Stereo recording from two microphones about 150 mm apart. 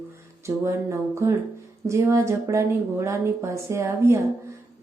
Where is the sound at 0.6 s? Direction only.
20° right (ahead or behind).